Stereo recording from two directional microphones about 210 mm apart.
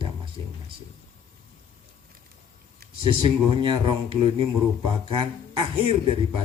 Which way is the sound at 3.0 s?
25° right (ahead or behind).